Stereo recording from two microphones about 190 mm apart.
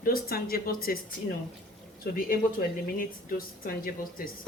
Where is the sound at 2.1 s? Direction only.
50° left (ahead or behind).